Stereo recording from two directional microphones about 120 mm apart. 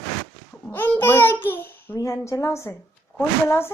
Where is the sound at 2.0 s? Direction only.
25° left (ahead or behind).